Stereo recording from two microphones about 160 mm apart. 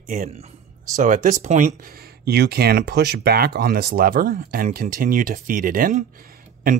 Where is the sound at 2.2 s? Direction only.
85° right.